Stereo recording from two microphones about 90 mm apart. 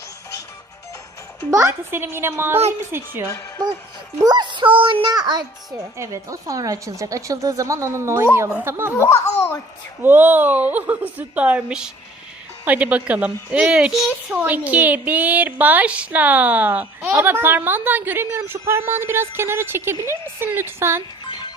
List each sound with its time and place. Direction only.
1.5 s speech: 35° right (ahead or behind)
4.2 s a child's voice: 50° right (ahead or behind); by 5.1 s 75° right (ahead or behind)
5.1 s a child's voice: 50° right (ahead or behind)
6.0 s a woman's voice: 35° right (ahead or behind)
9.0 s speech: 30° left (ahead or behind)
10.0 s a child's voice: 20° right (ahead or behind); by 14.4 s 5° right (ahead or behind)
14.4 s speech: 15° right (ahead or behind)